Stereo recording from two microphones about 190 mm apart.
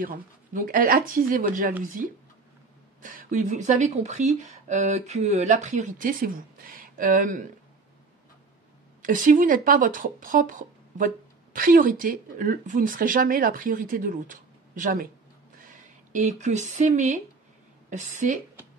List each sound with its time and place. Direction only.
0.0 s speech: 45° right (ahead or behind)
3.0 s speech: 45° right (ahead or behind)
9.0 s speech: 45° right (ahead or behind)
11.5 s speech: 45° right (ahead or behind)